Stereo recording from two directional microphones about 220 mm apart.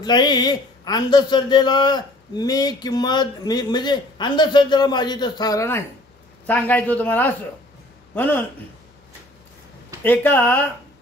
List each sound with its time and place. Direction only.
0.0 s a man's voice: 20° left (ahead or behind)
10.0 s speech: 10° left (ahead or behind)